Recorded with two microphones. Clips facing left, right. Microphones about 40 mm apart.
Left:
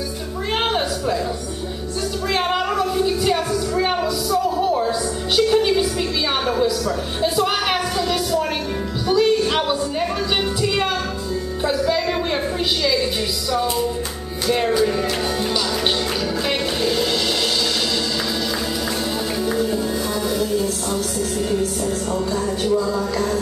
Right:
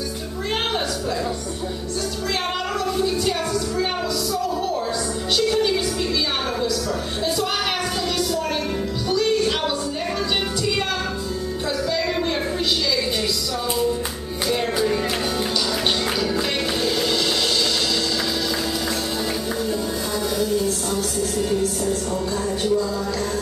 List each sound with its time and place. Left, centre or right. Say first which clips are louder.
2.8 s music: left 2 dB; centre
11.6 s music: left 5 dB; centre
20.3 s music: left 1 dB; centre